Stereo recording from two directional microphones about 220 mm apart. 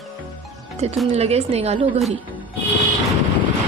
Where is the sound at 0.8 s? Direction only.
30° right (ahead or behind).